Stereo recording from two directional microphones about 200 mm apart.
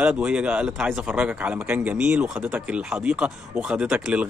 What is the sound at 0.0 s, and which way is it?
A man's voice, 5° right (ahead or behind).